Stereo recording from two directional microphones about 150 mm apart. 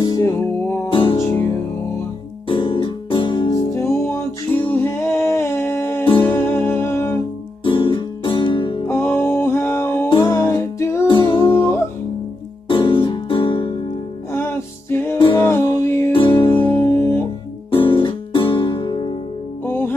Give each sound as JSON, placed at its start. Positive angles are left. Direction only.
{"t": 0.2, "sound": "music", "side_deg": 15}
{"t": 0.8, "sound": "music", "side_deg": 35}
{"t": 1.1, "sound": "music", "side_deg": 20}
{"t": 2.4, "sound": "music", "side_deg": 35}
{"t": 7.6, "sound": "music", "side_deg": 35}
{"t": 8.8, "sound": "music", "side_deg": 15}
{"t": 11.1, "sound": "music", "side_deg": 35}
{"t": 11.5, "sound": "music", "side_deg": 15}
{"t": 12.6, "sound": "music", "side_deg": 35}
{"t": 14.3, "sound": "music", "side_deg": 15}
{"t": 16.1, "sound": "music", "side_deg": 35}
{"t": 16.5, "sound": "music", "side_deg": 15}
{"t": 17.6, "sound": "music", "side_deg": 35}
{"t": 19.6, "sound": "music", "side_deg": 15}